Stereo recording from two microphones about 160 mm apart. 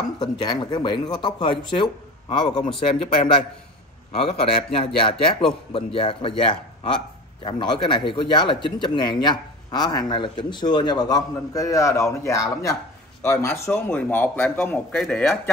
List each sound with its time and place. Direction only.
0.2 s a man's voice: 25° left (ahead or behind); by 15.3 s 5° left (ahead or behind)